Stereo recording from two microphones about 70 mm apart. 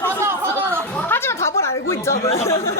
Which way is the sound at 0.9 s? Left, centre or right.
Left.